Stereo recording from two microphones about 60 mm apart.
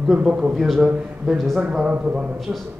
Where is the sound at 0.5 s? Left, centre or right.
Centre.